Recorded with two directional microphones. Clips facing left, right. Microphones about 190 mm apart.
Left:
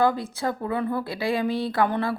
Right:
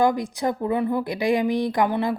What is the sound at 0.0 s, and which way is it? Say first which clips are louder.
A woman's voice: right 2 dB; 15° right (ahead or behind).